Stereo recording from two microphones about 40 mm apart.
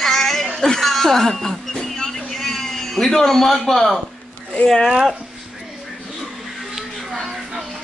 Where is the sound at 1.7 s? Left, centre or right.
Centre.